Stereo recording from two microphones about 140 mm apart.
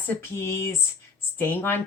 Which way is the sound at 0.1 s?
20° left (ahead or behind).